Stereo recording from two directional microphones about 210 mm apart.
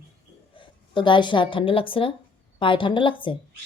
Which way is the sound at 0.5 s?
25° left (ahead or behind).